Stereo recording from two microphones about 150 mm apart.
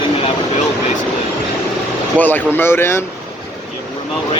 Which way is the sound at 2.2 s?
10° left (ahead or behind).